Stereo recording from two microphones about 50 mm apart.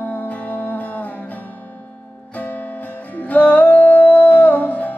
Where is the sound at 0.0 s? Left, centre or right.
Left.